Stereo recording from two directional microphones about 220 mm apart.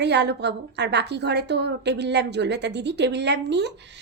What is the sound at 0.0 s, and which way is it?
A woman's voice, 50° right (ahead or behind).